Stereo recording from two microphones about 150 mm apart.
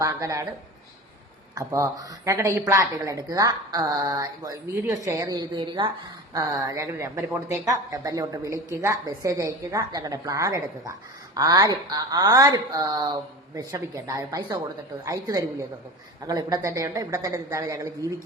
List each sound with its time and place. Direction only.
0.0 s speech: 20° right (ahead or behind)
1.5 s speech: 20° right (ahead or behind)